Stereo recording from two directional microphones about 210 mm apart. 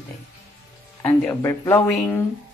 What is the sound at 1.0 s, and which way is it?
Speech, 15° left (ahead or behind).